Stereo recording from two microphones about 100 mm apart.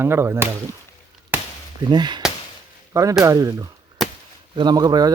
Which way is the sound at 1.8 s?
45° right (ahead or behind).